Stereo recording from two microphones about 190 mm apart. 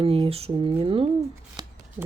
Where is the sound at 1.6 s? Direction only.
20° right (ahead or behind).